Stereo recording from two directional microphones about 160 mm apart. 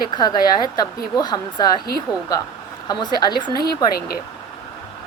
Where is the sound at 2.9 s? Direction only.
25° left (ahead or behind).